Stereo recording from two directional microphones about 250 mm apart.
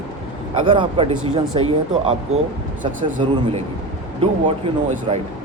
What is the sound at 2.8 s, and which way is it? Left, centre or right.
Speech, right.